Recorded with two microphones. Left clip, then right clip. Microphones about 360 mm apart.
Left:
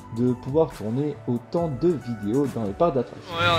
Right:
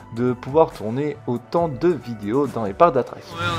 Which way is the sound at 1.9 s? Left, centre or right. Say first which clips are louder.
Right 3 dB; right.